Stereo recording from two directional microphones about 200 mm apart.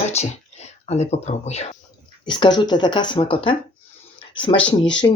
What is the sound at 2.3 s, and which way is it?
Speech, 20° left (ahead or behind).